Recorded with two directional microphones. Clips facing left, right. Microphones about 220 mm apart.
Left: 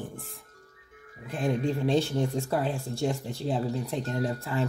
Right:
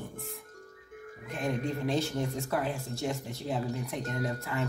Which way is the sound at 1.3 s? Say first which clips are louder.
Left 4 dB; 30° left (ahead or behind).